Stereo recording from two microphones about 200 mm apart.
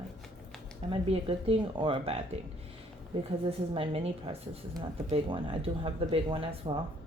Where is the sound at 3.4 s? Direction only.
30° right (ahead or behind).